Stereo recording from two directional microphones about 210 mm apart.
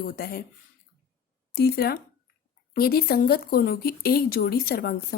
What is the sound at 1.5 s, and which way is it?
A woman's voice, 45° left (ahead or behind).